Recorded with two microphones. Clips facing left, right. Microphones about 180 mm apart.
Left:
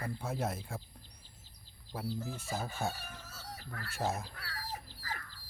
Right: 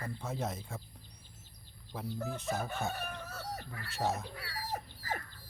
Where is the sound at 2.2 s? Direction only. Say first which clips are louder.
Right 3 dB; 60° right (ahead or behind).